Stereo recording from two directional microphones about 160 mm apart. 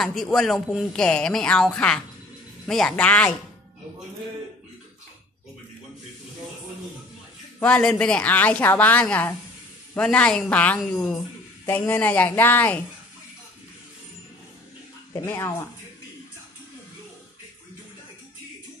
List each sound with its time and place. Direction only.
0.0 s a woman's voice: centre (ahead or behind)
7.6 s a woman's voice: 10° left (ahead or behind)
15.1 s a woman's voice: 15° left (ahead or behind)